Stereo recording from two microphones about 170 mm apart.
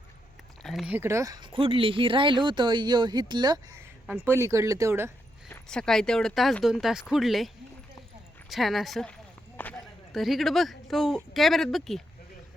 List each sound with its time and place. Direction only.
0.6 s speech: centre (ahead or behind)
5.6 s speech: 5° left (ahead or behind)